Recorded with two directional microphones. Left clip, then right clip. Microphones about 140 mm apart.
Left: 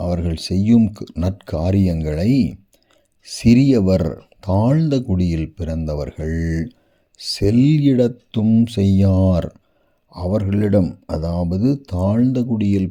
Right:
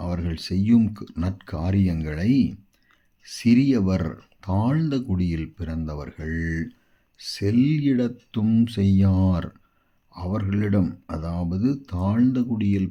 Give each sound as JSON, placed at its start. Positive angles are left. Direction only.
{"t": 0.0, "sound": "speech", "side_deg": 40}